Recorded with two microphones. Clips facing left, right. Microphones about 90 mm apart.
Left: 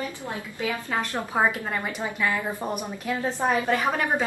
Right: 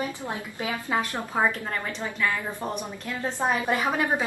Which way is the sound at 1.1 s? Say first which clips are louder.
Left 1 dB; 15° left (ahead or behind).